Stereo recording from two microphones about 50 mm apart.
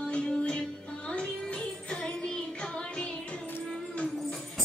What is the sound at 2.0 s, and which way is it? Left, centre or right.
Music, centre.